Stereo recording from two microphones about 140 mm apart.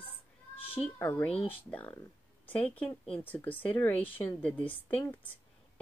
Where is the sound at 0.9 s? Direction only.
15° left (ahead or behind).